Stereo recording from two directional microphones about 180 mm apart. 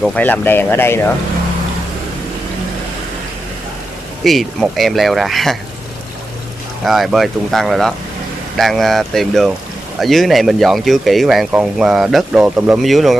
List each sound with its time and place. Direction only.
0.0 s speech: 10° left (ahead or behind)
4.2 s speech: centre (ahead or behind)
6.8 s speech: centre (ahead or behind)